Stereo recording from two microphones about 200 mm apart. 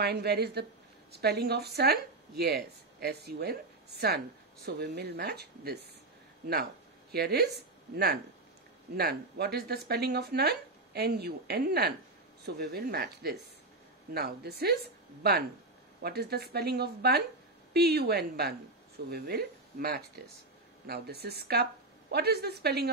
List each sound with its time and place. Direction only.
0.0 s a woman's voice: 55° right (ahead or behind)
4.6 s speech: 55° right (ahead or behind)
16.0 s speech: 50° right (ahead or behind)